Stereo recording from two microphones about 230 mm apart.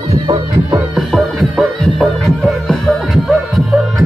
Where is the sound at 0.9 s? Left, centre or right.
Centre.